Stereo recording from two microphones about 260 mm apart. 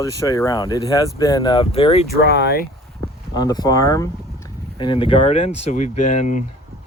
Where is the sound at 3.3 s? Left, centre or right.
Centre.